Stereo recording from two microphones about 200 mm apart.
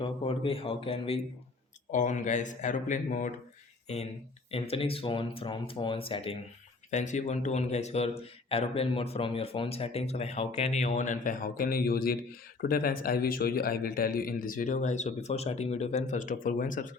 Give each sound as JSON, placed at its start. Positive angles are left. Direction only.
{"t": 0.0, "sound": "speech", "side_deg": 25}
{"t": 6.9, "sound": "speech", "side_deg": 35}